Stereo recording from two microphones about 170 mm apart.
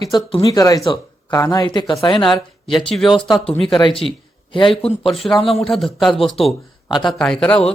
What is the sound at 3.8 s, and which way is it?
Speech, 30° left (ahead or behind).